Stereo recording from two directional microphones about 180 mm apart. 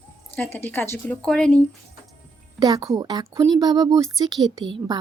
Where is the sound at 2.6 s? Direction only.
20° right (ahead or behind).